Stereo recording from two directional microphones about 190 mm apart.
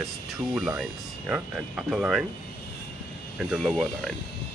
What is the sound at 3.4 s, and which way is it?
Speech, centre (ahead or behind).